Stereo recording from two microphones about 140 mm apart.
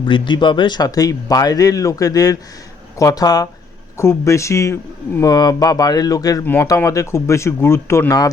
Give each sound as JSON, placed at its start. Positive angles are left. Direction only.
{"t": 0.0, "sound": "speech", "side_deg": 35}